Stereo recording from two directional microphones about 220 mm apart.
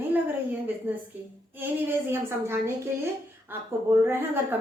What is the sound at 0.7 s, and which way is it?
Speech, 10° right (ahead or behind).